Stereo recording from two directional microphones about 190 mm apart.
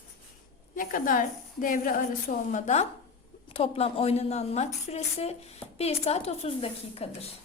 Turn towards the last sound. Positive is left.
turn(degrees=30)  # may be behind; listen again after turning